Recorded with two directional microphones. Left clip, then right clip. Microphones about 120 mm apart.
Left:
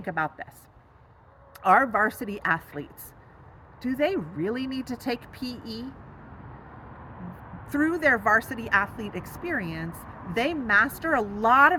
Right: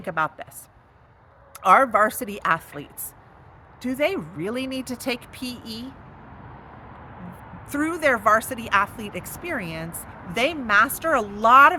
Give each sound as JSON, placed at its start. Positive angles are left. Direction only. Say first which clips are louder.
{"t": 0.0, "sound": "speech", "louder": "right 4 dB", "side_deg": -25}
{"t": 1.5, "sound": "speech", "louder": "right 4 dB", "side_deg": -25}
{"t": 7.6, "sound": "speech", "louder": "right 1 dB", "side_deg": -20}